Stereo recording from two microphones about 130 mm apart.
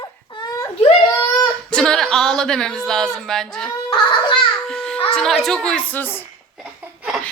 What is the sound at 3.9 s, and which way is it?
Speech, 40° left (ahead or behind).